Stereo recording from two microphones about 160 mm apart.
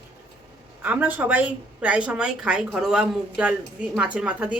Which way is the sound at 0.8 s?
10° right (ahead or behind).